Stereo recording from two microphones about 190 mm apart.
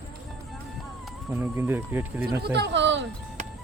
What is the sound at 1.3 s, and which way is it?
Speech, 10° right (ahead or behind).